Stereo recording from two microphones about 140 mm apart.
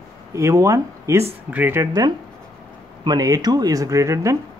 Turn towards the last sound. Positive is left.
turn(degrees=-20)  # may be behind; listen again after turning